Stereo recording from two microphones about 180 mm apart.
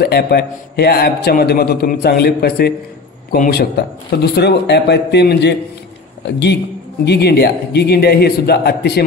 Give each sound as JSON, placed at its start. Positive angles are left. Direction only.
{"t": 0.0, "sound": "a man's voice", "side_deg": 60}